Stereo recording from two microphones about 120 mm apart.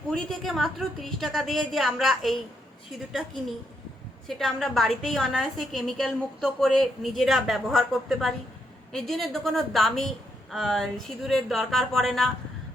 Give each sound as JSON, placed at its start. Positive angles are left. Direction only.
{"t": 0.1, "sound": "a woman's voice", "side_deg": 0}
{"t": 4.3, "sound": "a woman's voice", "side_deg": 0}